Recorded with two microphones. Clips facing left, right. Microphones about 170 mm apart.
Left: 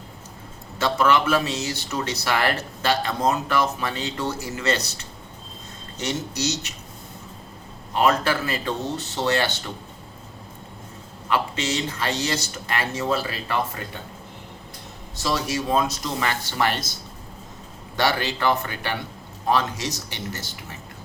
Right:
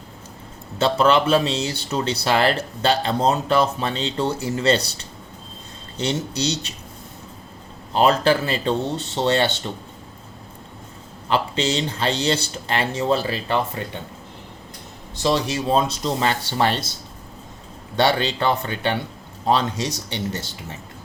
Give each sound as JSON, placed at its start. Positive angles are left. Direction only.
{"t": 0.8, "sound": "speech", "side_deg": -30}
{"t": 7.9, "sound": "speech", "side_deg": -30}
{"t": 11.3, "sound": "speech", "side_deg": -30}
{"t": 15.2, "sound": "speech", "side_deg": -25}
{"t": 17.9, "sound": "speech", "side_deg": -25}